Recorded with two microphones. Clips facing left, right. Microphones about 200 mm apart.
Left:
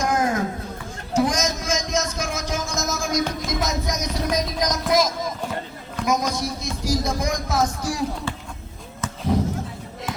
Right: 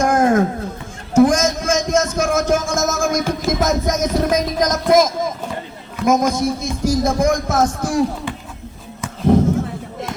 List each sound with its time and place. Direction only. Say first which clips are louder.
0.0 s a sound: right 7 dB; 50° right (ahead or behind)
4.9 s speech: right 7 dB; 50° right (ahead or behind)
9.3 s speech: right 8 dB; 50° right (ahead or behind)